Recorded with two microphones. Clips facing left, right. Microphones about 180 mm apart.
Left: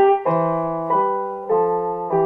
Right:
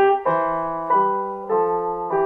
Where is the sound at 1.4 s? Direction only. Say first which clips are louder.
Left 2 dB; 15° left (ahead or behind).